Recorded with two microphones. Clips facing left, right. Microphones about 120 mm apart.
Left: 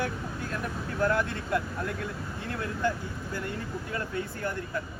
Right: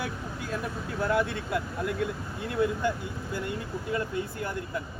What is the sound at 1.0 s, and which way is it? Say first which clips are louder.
Speech: even; 15° right (ahead or behind).